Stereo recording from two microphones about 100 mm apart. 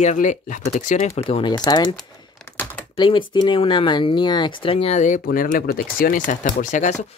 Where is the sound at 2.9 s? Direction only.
50° left (ahead or behind); by 5.0 s 80° left.